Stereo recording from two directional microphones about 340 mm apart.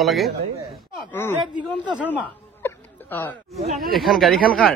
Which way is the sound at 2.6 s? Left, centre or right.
Centre.